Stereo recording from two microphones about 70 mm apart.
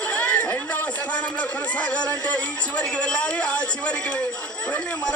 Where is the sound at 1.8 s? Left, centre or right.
Centre.